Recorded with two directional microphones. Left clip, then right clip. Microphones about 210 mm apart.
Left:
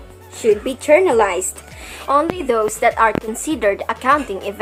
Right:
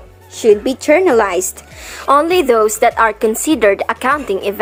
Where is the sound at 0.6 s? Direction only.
25° right (ahead or behind).